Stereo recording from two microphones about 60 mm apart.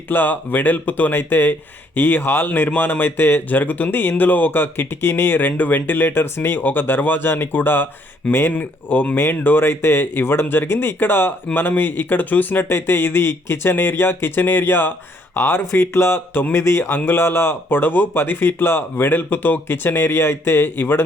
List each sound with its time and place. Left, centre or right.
0.1 s speech: left
8.5 s speech: left